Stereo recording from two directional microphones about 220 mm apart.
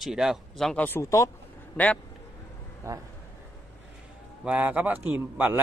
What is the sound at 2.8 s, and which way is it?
Speech, 15° right (ahead or behind).